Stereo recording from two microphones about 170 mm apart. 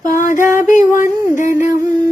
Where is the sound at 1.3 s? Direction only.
50° left (ahead or behind).